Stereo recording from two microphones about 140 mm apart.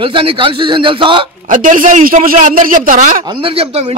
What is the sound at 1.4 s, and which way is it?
A man's voice, 70° right (ahead or behind).